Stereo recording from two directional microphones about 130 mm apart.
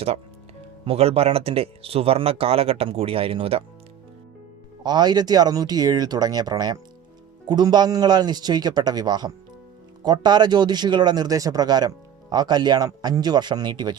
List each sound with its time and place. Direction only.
0.9 s speech: 50° right (ahead or behind)
4.8 s speech: 35° right (ahead or behind)